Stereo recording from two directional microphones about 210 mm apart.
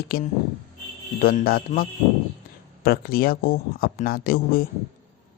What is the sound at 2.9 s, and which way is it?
Speech, 45° left (ahead or behind).